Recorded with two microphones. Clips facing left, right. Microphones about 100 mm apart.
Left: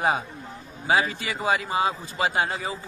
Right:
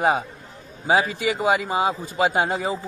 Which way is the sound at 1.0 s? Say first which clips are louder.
Right 5 dB; 10° right (ahead or behind).